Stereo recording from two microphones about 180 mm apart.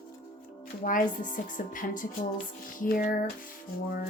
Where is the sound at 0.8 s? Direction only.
45° left (ahead or behind).